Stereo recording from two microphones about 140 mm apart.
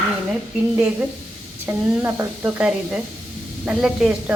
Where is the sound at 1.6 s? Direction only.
15° right (ahead or behind).